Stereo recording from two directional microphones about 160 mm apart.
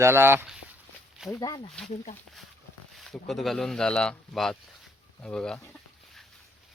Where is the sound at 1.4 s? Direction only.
30° left (ahead or behind).